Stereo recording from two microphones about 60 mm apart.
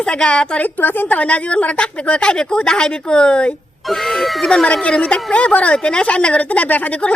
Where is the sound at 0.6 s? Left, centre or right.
Left; by 3.5 s centre.